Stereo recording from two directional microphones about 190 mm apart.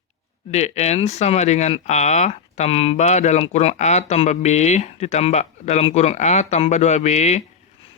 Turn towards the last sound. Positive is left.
turn(degrees=35)  # may be behind; listen again after turning